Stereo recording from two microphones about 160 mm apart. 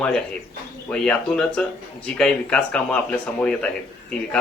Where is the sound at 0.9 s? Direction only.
10° left (ahead or behind).